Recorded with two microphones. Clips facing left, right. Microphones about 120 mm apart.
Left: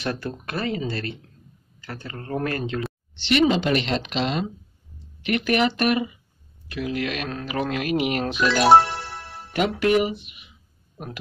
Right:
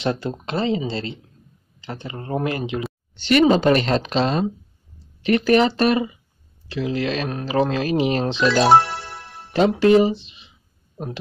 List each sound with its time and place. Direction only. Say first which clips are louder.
0.0 s speech: right 5 dB; 20° right (ahead or behind)
3.2 s speech: right 4 dB; 45° right (ahead or behind)
9.5 s speech: right 6 dB; 30° right (ahead or behind)